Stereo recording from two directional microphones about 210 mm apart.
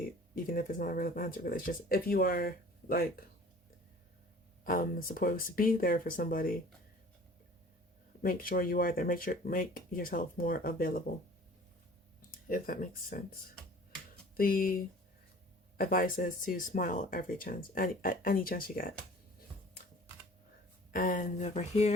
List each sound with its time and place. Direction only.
0.4 s speech: 45° left (ahead or behind)
4.6 s speech: 40° left (ahead or behind)
8.2 s speech: 45° left (ahead or behind)
12.5 s speech: 40° left (ahead or behind)
14.3 s speech: 40° left (ahead or behind)
15.8 s speech: 40° left (ahead or behind)
20.9 s speech: 40° left (ahead or behind)